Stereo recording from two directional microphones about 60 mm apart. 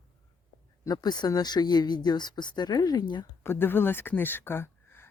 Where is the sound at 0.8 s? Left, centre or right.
Left.